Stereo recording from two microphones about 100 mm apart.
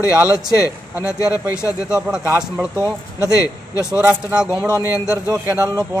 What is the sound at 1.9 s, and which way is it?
Speech, 10° right (ahead or behind).